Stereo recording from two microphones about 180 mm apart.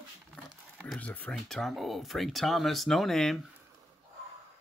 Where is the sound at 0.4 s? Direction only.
10° left (ahead or behind).